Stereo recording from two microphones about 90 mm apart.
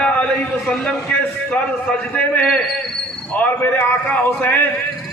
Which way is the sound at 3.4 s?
15° left (ahead or behind).